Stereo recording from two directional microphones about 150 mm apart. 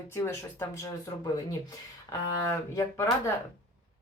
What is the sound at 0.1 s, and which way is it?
Speech, 15° left (ahead or behind).